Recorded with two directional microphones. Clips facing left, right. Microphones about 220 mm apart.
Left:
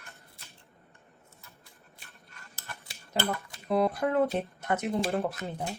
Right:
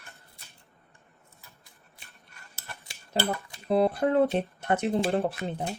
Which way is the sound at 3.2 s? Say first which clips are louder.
Right 2 dB; 30° right (ahead or behind).